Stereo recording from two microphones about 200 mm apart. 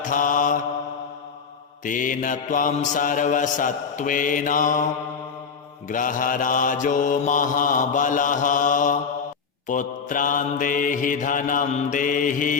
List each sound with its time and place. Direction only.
0.0 s mantra: 40° left (ahead or behind)
1.8 s mantra: 40° left (ahead or behind)
5.9 s mantra: 40° left (ahead or behind)